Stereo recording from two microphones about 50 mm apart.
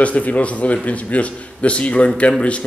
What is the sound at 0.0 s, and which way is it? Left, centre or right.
A man's voice, left.